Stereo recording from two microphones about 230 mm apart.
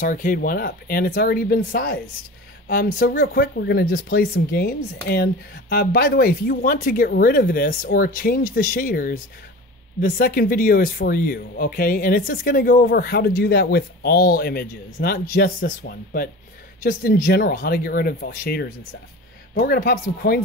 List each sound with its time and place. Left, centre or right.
0.0 s speech: left